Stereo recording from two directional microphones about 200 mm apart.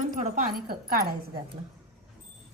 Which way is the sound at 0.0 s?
40° right (ahead or behind).